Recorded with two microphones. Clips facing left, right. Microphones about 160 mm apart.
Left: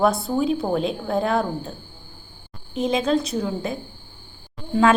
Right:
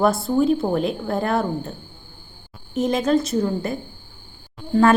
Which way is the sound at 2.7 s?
Centre (ahead or behind).